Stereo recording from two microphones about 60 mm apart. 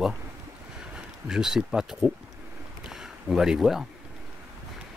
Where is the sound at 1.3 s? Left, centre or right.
Centre.